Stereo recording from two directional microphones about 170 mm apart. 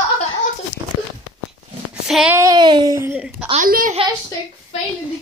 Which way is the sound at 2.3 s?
20° right (ahead or behind).